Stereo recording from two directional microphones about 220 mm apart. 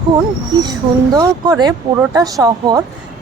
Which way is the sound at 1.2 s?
15° right (ahead or behind).